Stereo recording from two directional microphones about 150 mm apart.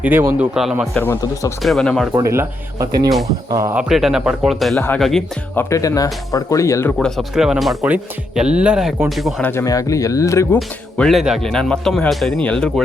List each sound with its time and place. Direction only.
0.0 s speech: 15° right (ahead or behind)
0.5 s speech: 5° right (ahead or behind)
0.9 s speech: 15° left (ahead or behind)
1.6 s speech: centre (ahead or behind)
2.1 s speech: 20° right (ahead or behind)
3.8 s speech: 5° right (ahead or behind)
5.5 s speech: 20° left (ahead or behind)
7.0 s speech: centre (ahead or behind)
9.4 s speech: 15° left (ahead or behind)
10.9 s speech: 5° left (ahead or behind)